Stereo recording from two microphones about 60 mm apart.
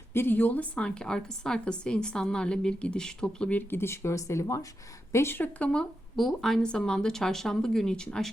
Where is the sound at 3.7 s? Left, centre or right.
Left.